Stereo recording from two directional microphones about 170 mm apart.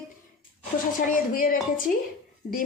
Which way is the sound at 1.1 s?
55° left (ahead or behind).